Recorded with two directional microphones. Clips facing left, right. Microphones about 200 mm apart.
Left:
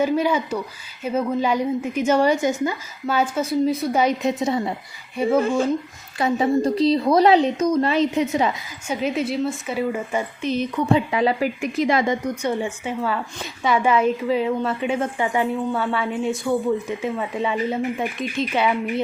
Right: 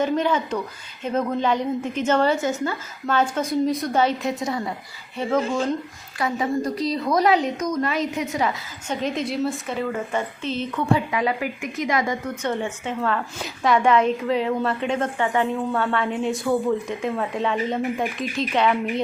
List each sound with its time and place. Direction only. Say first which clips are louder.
0.0 s a woman's voice: left 2 dB; 10° left (ahead or behind)
5.1 s a woman's voice: left 4 dB; 10° left (ahead or behind)
6.1 s a woman's voice: left 4 dB; 25° left (ahead or behind)
8.9 s a woman's voice: left 2 dB; 5° left (ahead or behind)
11.1 s speech: left 4 dB; 30° left (ahead or behind)
12.2 s a woman's voice: left 2 dB; 10° left (ahead or behind)